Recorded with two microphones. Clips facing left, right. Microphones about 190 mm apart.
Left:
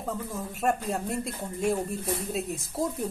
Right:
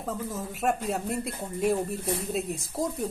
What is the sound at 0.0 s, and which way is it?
Speech, centre (ahead or behind).